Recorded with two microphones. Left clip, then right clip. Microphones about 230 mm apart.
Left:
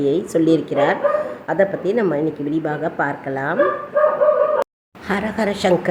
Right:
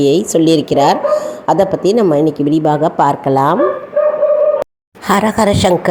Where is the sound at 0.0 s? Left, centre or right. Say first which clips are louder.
Right 6 dB; right.